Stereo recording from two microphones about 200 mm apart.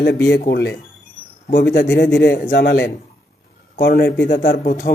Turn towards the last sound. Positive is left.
turn(degrees=45)  # may be behind; listen again after turning